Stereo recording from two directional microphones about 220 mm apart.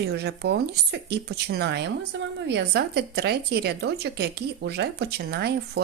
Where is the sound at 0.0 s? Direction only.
50° right (ahead or behind).